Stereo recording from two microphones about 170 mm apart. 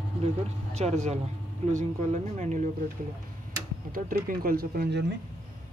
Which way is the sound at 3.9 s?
55° right (ahead or behind).